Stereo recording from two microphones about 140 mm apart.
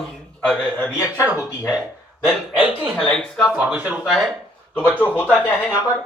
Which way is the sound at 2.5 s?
15° right (ahead or behind).